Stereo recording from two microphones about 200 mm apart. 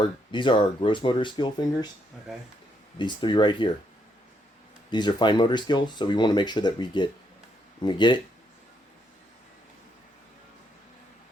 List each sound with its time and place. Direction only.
0.0 s speech: 25° left (ahead or behind)
3.0 s speech: 25° left (ahead or behind)
4.9 s speech: 20° left (ahead or behind)